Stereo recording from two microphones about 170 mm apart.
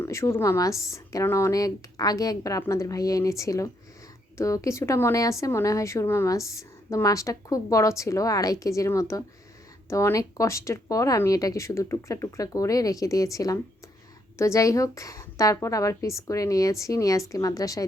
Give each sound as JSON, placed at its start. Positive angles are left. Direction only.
{"t": 0.0, "sound": "speech", "side_deg": 15}